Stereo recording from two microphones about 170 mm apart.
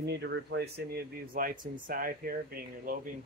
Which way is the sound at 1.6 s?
55° right (ahead or behind).